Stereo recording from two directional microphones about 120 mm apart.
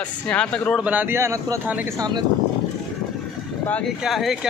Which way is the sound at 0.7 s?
10° right (ahead or behind).